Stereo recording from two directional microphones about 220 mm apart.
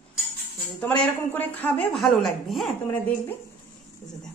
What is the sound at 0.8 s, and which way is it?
A woman's voice, 5° left (ahead or behind).